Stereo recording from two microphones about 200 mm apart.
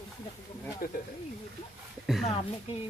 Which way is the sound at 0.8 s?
50° left (ahead or behind).